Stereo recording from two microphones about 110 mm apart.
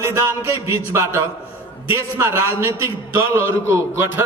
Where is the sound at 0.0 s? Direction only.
25° right (ahead or behind).